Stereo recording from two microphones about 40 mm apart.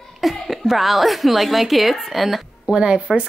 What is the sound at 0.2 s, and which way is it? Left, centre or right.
Speech, centre.